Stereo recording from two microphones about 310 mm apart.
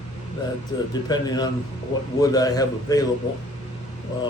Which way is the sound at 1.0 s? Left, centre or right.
Centre.